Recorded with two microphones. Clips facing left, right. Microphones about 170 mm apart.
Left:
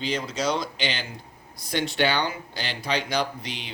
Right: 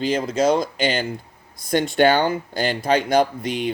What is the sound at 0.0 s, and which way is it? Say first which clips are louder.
Speech: right 8 dB; 50° right (ahead or behind).